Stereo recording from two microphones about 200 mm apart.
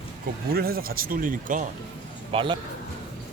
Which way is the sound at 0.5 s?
50° right (ahead or behind).